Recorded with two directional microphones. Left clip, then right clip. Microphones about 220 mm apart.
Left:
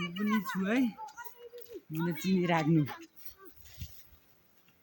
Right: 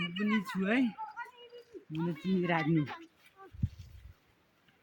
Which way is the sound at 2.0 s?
10° right (ahead or behind).